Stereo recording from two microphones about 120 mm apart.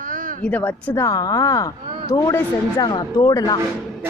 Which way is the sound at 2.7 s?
35° left (ahead or behind).